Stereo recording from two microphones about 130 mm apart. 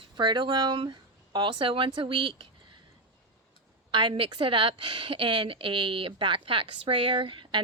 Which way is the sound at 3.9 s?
40° right (ahead or behind).